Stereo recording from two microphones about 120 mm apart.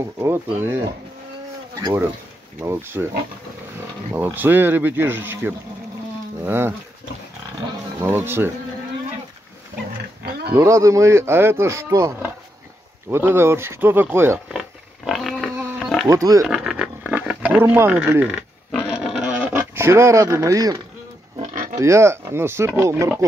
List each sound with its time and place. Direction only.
0.2 s speech: 20° right (ahead or behind)
2.6 s speech: 20° right (ahead or behind)
4.1 s speech: 15° right (ahead or behind)
8.0 s speech: 20° right (ahead or behind)
10.5 s speech: 25° right (ahead or behind)
13.1 s speech: 20° right (ahead or behind)
14.5 s wild animals: 5° right (ahead or behind)
15.8 s pig: 5° left (ahead or behind)
16.1 s speech: 30° right (ahead or behind)
16.4 s a sound: 5° right (ahead or behind)
18.7 s dog: 5° left (ahead or behind)
18.9 s a sound: 5° right (ahead or behind)
19.7 s speech: 20° right (ahead or behind)
21.7 s speech: 25° right (ahead or behind)